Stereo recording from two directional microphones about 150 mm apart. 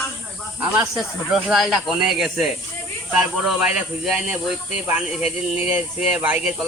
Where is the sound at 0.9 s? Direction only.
Centre (ahead or behind).